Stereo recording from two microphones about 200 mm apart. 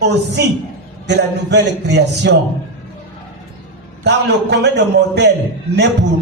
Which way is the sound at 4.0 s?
60° right (ahead or behind).